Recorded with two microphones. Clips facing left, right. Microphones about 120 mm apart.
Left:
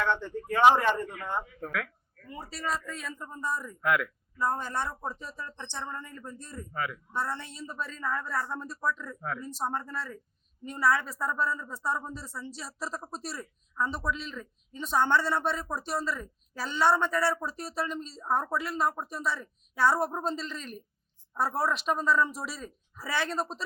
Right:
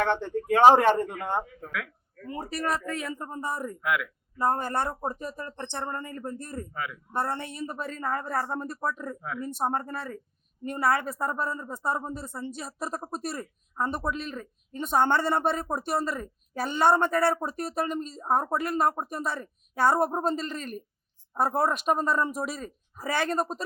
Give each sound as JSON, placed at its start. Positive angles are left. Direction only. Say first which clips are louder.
{"t": 0.0, "sound": "speech", "louder": "right 3 dB", "side_deg": -65}
{"t": 0.9, "sound": "speech", "louder": "right 5 dB", "side_deg": -50}
{"t": 1.6, "sound": "speech", "louder": "left 1 dB", "side_deg": -15}
{"t": 2.4, "sound": "speech", "louder": "right 4 dB", "side_deg": -60}
{"t": 3.8, "sound": "speech", "louder": "left 3 dB", "side_deg": -5}
{"t": 4.4, "sound": "speech", "louder": "right 4 dB", "side_deg": -55}
{"t": 6.7, "sound": "speech", "louder": "left 4 dB", "side_deg": -10}
{"t": 7.1, "sound": "speech", "louder": "right 4 dB", "side_deg": -55}